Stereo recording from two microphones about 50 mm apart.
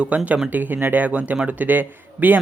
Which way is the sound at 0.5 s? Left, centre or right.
Right.